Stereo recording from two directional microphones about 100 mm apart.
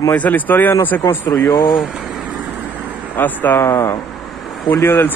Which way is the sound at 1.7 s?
5° right (ahead or behind).